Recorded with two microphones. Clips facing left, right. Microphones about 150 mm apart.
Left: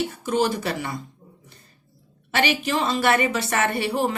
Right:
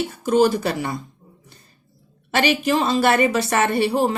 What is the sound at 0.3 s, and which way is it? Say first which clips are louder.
Speech: right 7 dB; 40° right (ahead or behind).